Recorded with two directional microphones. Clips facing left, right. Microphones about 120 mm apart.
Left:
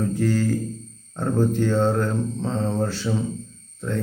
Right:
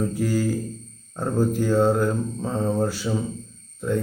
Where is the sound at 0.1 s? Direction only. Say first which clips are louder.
Left 1 dB; 10° right (ahead or behind).